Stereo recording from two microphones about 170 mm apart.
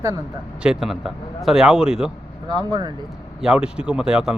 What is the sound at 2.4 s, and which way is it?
Speech, 25° right (ahead or behind).